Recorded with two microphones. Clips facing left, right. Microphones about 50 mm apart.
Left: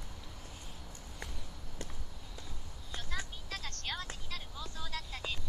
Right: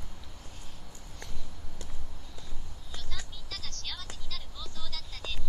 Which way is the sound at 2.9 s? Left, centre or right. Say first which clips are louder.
Left 3 dB; left.